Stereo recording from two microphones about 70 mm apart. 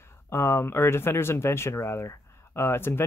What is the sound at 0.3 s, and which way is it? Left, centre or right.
Speech, left.